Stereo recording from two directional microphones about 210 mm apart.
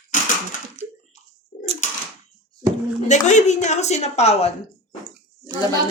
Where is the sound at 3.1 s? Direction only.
35° left (ahead or behind).